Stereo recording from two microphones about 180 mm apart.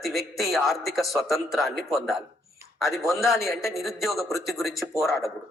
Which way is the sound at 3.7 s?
Centre (ahead or behind).